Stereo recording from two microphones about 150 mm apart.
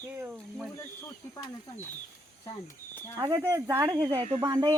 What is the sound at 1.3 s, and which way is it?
Speech, 20° left (ahead or behind).